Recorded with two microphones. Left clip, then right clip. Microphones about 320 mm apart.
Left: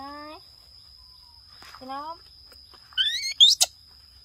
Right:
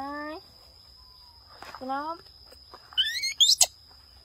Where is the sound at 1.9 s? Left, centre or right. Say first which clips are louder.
Right 3 dB; left.